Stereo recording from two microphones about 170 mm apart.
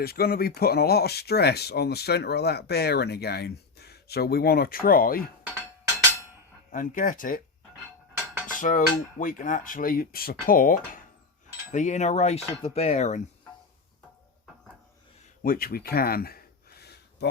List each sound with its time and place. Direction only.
0.0 s speech: 65° left (ahead or behind)
6.7 s dishes: 50° left (ahead or behind)
8.5 s dishes: 50° left (ahead or behind)
15.4 s a sound: 60° left (ahead or behind)